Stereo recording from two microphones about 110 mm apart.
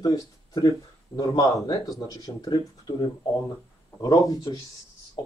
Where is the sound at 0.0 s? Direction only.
30° left (ahead or behind).